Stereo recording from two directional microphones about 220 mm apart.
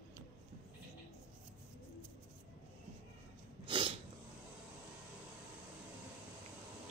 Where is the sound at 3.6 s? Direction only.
20° right (ahead or behind).